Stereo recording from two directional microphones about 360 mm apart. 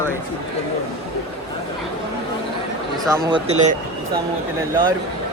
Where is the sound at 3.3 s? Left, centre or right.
Centre.